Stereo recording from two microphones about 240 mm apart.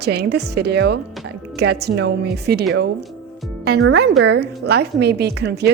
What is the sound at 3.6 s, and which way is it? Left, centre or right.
Speech, right.